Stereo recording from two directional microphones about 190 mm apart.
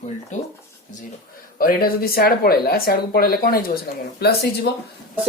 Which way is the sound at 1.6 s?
50° left (ahead or behind).